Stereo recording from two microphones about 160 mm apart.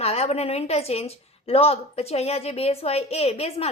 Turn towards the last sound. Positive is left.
turn(degrees=40)  # may be behind; listen again after turning